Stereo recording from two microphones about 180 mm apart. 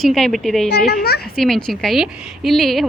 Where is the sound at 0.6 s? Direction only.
65° left (ahead or behind).